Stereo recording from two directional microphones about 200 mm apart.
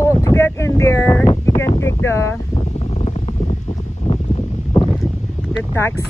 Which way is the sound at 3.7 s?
25° left (ahead or behind).